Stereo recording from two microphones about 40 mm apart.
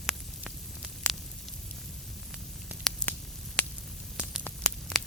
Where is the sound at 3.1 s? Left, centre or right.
Left.